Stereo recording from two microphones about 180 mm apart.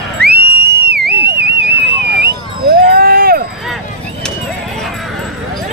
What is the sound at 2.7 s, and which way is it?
Vehicle, 55° right (ahead or behind).